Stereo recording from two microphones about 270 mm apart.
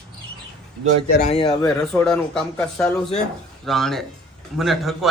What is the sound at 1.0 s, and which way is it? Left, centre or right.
Speech, left.